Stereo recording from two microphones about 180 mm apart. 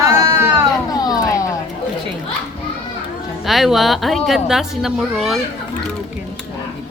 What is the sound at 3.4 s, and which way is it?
A woman's voice, centre (ahead or behind).